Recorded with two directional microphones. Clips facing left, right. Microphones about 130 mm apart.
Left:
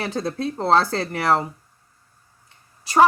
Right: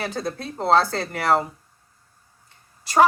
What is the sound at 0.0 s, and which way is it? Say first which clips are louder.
Speech: left 3 dB; 25° left (ahead or behind).